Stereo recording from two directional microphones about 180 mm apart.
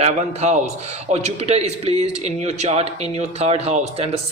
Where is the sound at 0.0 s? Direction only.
40° right (ahead or behind).